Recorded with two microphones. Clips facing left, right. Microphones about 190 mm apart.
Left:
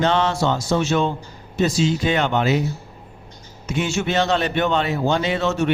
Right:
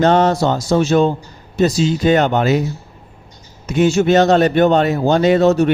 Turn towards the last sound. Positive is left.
turn(degrees=-40)  # may be behind; listen again after turning